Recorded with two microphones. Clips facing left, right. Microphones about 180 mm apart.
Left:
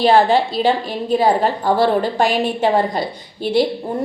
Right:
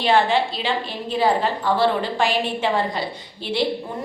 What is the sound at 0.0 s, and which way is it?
A woman's voice, 40° left (ahead or behind).